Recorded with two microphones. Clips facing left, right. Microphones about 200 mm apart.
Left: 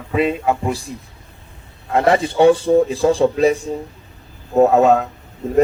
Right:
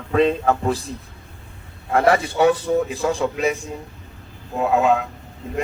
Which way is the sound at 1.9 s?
25° left (ahead or behind).